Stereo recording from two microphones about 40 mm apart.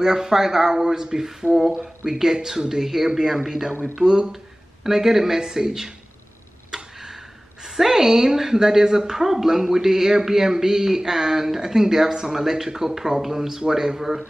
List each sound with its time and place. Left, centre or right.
0.0 s a woman's voice: centre
6.7 s tick-tock: centre
7.6 s a woman's voice: centre